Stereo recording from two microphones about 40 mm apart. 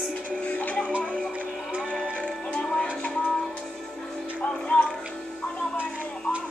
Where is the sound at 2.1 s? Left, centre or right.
Left.